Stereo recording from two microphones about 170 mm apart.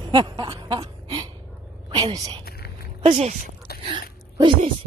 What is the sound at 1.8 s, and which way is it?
A woman's voice, 25° right (ahead or behind).